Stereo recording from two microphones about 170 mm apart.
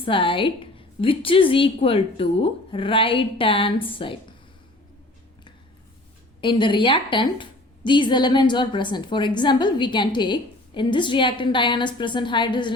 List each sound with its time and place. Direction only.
0.0 s a woman's voice: 30° left (ahead or behind)
6.4 s a woman's voice: 30° left (ahead or behind)